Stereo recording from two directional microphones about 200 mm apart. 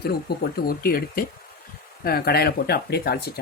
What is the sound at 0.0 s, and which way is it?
Speech, 50° left (ahead or behind).